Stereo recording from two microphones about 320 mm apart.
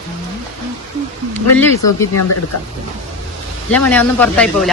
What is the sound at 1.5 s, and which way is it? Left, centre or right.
Speech, centre.